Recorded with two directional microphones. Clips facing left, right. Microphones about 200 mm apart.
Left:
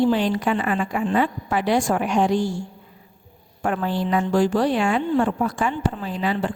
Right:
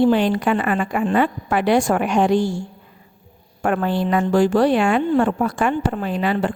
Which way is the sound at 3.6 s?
60° right (ahead or behind).